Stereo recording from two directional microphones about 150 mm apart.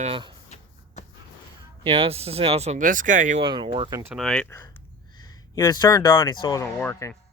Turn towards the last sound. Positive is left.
turn(degrees=15)  # may be behind; listen again after turning